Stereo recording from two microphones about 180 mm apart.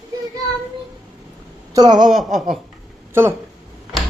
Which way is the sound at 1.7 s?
25° right (ahead or behind).